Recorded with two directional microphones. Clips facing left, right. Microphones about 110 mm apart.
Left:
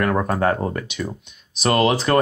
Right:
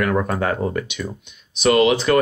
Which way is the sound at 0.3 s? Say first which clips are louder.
Left 1 dB; 35° left (ahead or behind).